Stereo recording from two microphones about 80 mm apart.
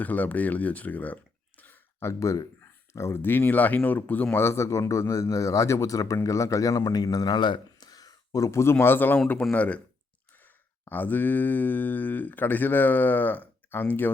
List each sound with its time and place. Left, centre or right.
0.0 s speech: centre
2.0 s a man's voice: left; by 4.4 s centre
4.4 s a man's voice: left
8.8 s speech: left
10.8 s speech: left